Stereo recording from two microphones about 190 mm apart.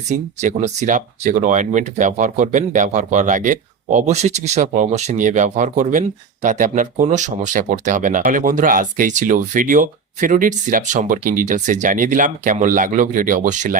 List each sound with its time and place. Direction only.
0.1 s speech: 35° right (ahead or behind)